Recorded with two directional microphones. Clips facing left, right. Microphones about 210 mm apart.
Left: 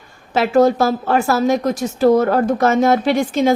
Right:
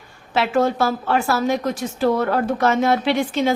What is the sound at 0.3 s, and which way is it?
A woman's voice, 40° left (ahead or behind).